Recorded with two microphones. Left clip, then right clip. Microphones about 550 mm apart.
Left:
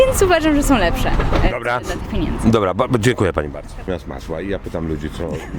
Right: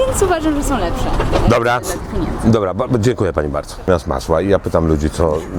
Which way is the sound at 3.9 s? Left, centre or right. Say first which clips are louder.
Right 11 dB; centre.